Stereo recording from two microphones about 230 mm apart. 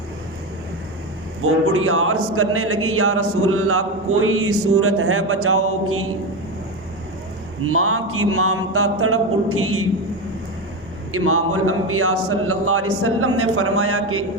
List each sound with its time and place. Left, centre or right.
1.4 s speech: right
7.6 s speech: right
11.1 s speech: right